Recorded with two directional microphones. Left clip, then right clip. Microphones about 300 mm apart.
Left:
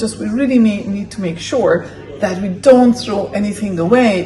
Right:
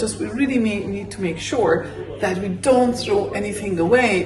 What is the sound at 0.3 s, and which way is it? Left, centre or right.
Speech, centre.